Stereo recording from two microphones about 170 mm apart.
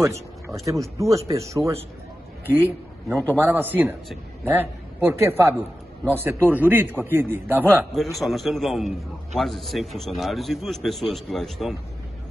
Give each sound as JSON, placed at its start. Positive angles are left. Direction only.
{"t": 0.7, "sound": "a man's voice", "side_deg": -20}
{"t": 3.3, "sound": "a man's voice", "side_deg": -15}
{"t": 7.9, "sound": "a man's voice", "side_deg": 0}